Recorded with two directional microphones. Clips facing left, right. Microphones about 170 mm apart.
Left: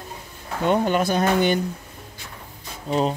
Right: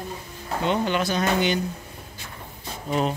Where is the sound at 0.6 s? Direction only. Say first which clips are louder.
Left 4 dB; 50° left (ahead or behind).